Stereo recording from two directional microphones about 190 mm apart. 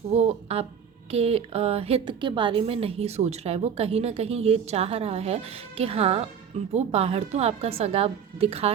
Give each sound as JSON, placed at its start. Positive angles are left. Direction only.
{"t": 0.1, "sound": "a woman's voice", "side_deg": -35}